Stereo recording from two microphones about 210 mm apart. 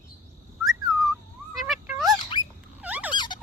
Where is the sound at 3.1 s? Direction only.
20° left (ahead or behind).